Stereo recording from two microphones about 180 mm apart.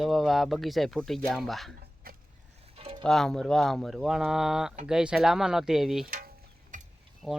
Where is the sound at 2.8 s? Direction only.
30° right (ahead or behind).